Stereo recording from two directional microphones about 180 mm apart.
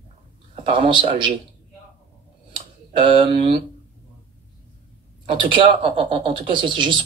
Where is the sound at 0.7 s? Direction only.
25° right (ahead or behind).